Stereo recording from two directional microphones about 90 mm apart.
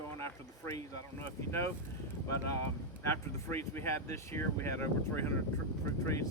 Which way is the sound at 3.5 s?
30° left (ahead or behind).